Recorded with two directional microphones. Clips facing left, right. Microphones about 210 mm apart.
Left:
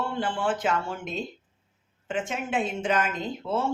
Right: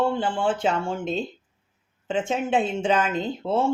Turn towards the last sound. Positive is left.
turn(degrees=-30)  # may be behind; listen again after turning